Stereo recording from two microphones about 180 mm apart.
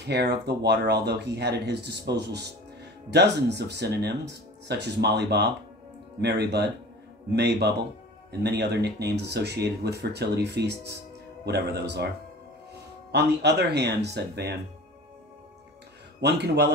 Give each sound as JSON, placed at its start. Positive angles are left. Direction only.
{"t": 0.0, "sound": "speech", "side_deg": -65}
{"t": 13.1, "sound": "speech", "side_deg": -70}
{"t": 16.2, "sound": "speech", "side_deg": -70}